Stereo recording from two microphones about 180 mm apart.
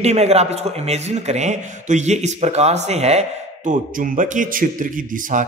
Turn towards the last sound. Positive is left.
turn(degrees=-45)  # may be behind; listen again after turning